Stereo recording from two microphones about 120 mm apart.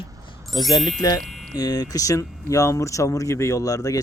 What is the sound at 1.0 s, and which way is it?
Chime, 30° left (ahead or behind).